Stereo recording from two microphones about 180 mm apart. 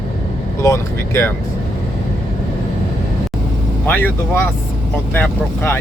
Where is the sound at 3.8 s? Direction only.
10° left (ahead or behind).